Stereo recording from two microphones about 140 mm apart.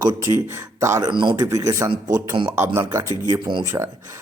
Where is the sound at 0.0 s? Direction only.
25° right (ahead or behind).